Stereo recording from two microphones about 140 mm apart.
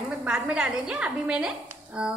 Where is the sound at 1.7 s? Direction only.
10° right (ahead or behind).